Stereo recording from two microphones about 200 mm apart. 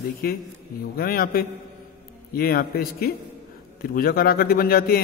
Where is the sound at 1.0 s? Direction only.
50° left (ahead or behind).